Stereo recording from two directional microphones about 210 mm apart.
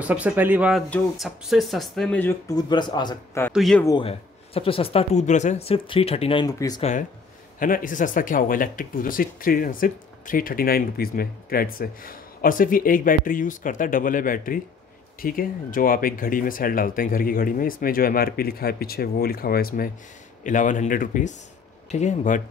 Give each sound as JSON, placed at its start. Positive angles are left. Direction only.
{"t": 0.0, "sound": "speech", "side_deg": -5}
{"t": 3.5, "sound": "speech", "side_deg": 0}
{"t": 3.8, "sound": "speech", "side_deg": 25}
{"t": 6.8, "sound": "speech", "side_deg": 35}